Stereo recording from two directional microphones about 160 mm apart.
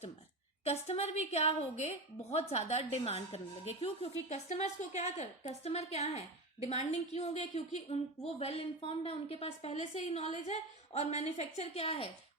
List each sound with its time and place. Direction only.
0.6 s a woman's voice: 40° left (ahead or behind)